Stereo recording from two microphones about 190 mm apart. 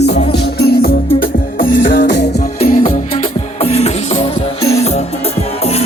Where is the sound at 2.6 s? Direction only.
35° left (ahead or behind).